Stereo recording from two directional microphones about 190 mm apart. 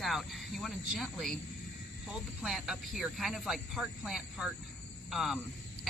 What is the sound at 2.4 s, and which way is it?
Speech, centre (ahead or behind).